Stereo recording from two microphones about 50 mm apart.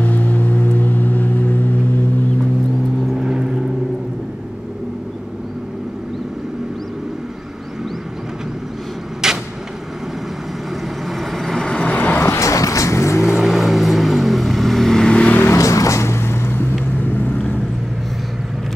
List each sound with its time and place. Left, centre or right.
0.0 s vehicle: left
3.1 s vehicle: centre
9.2 s vehicle: centre
11.1 s vehicle: centre
11.6 s vehicle: centre
11.9 s vehicle: left
12.2 s vehicle: left
13.2 s vehicle: centre
15.0 s vehicle: left
15.4 s vehicle: left